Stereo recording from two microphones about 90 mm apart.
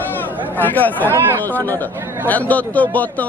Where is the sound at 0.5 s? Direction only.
20° left (ahead or behind).